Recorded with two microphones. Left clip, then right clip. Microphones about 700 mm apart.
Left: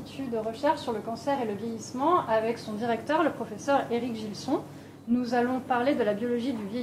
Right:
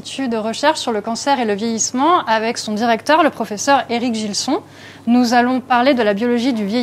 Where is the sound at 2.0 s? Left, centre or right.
Right.